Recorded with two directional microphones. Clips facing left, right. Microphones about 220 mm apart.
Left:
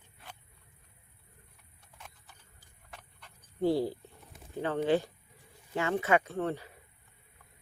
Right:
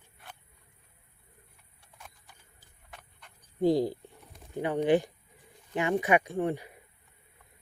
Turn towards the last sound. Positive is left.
turn(degrees=-15)  # may be behind; listen again after turning